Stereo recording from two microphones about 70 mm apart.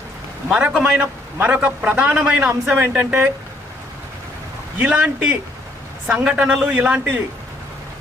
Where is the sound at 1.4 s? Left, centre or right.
Right.